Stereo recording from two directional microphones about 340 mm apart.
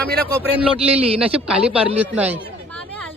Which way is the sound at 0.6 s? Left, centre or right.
Centre.